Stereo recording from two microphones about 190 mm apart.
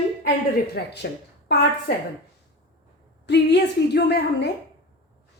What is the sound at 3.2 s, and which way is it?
A woman's voice, 65° left (ahead or behind).